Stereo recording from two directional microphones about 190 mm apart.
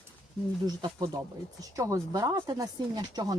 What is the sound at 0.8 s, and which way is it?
Speech, 20° right (ahead or behind).